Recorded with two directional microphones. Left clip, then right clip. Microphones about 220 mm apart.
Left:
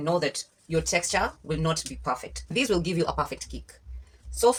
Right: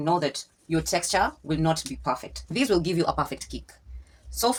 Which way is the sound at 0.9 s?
25° right (ahead or behind).